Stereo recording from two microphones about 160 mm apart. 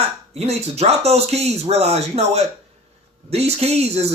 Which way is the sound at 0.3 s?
40° right (ahead or behind).